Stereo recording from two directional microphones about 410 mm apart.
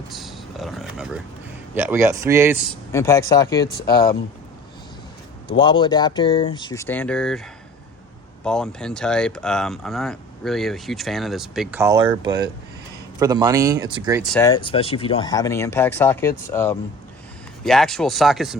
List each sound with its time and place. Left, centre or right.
0.1 s a sound: centre
1.7 s speech: centre
3.8 s speech: left
5.5 s speech: centre
8.4 s speech: centre
14.3 s speech: centre